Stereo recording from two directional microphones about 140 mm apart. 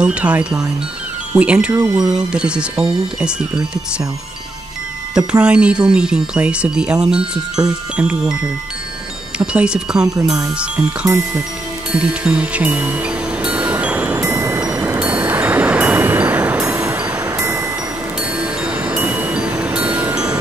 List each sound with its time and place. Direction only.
0.0 s speech: 10° right (ahead or behind)
1.7 s speech: 30° right (ahead or behind)
2.1 s speech: 5° right (ahead or behind)
5.1 s speech: 10° right (ahead or behind)
9.4 s speech: 5° right (ahead or behind)
11.9 s music: 10° right (ahead or behind)
14.4 s music: 25° right (ahead or behind)
14.7 s music: 10° right (ahead or behind)